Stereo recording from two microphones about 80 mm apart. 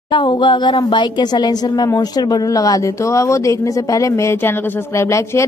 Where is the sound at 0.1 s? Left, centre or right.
Left.